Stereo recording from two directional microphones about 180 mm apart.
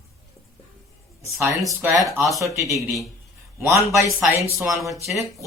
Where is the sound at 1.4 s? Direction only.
15° right (ahead or behind).